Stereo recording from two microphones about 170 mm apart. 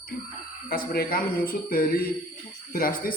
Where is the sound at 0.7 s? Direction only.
60° left (ahead or behind).